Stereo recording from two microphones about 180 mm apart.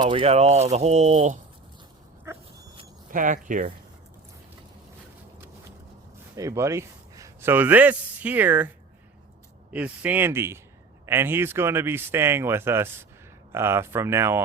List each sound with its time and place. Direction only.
0.0 s speech: 30° right (ahead or behind)
2.3 s dog: 15° right (ahead or behind)
3.1 s speech: 45° right (ahead or behind)
6.3 s a man's voice: 15° right (ahead or behind)
9.7 s speech: 10° right (ahead or behind)